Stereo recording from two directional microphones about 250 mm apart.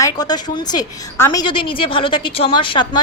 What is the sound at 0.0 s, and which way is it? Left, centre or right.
A woman's voice, centre.